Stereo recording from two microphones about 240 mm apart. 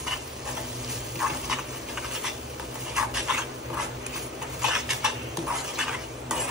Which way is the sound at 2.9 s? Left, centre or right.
Centre.